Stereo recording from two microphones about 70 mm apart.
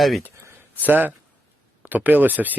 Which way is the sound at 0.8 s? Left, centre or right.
Right.